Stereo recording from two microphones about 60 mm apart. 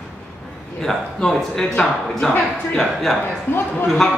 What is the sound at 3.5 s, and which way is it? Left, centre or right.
Speech, left.